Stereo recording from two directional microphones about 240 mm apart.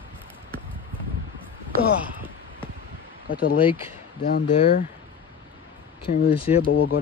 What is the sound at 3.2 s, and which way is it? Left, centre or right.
Speech, left.